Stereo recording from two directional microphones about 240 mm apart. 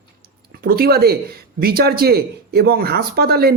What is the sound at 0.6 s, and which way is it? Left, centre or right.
A man's voice, right.